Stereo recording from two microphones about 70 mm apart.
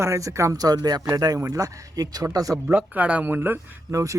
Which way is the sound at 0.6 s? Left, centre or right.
Right.